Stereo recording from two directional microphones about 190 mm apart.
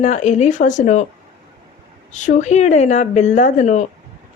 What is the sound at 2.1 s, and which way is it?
A woman's voice, 40° left (ahead or behind).